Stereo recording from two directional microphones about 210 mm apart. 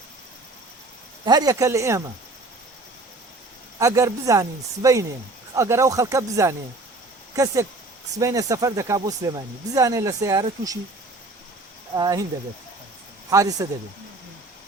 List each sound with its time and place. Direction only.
1.2 s speech: 20° right (ahead or behind)
3.8 s speech: 15° right (ahead or behind)
11.9 s speech: 20° right (ahead or behind)
13.3 s speech: 15° right (ahead or behind)